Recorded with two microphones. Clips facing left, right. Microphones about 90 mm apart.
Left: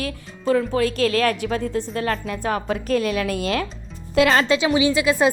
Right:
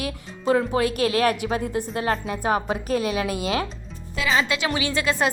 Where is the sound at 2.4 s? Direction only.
15° right (ahead or behind).